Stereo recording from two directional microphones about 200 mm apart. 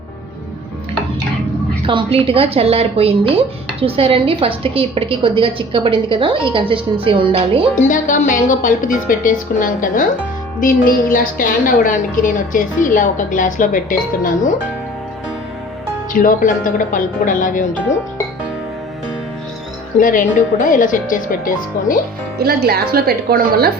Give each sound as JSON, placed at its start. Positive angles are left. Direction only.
{"t": 1.9, "sound": "speech", "side_deg": -25}
{"t": 7.9, "sound": "a woman's voice", "side_deg": 40}
{"t": 16.2, "sound": "a woman's voice", "side_deg": 40}
{"t": 20.0, "sound": "a woman's voice", "side_deg": 40}
{"t": 22.4, "sound": "speech", "side_deg": -50}